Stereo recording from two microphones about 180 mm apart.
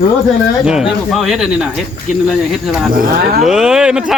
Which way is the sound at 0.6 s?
5° right (ahead or behind).